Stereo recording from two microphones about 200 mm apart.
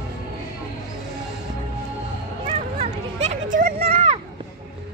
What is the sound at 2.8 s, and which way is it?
Children playing, 35° right (ahead or behind).